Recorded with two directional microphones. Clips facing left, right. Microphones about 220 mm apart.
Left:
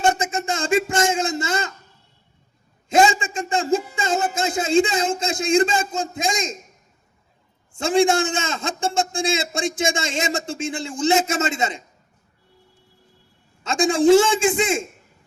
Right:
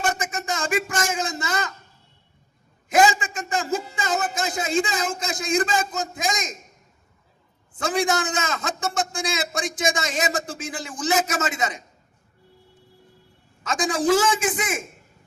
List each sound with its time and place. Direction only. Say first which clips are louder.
0.0 s speech: left 6 dB; 25° left (ahead or behind)
2.9 s a man's voice: left 2 dB; 25° left (ahead or behind)
7.8 s a man's voice: left 6 dB; 25° left (ahead or behind)
13.7 s a man's voice: left 6 dB; 25° left (ahead or behind)